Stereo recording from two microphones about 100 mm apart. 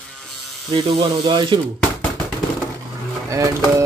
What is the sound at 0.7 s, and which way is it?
Speech, 70° right (ahead or behind).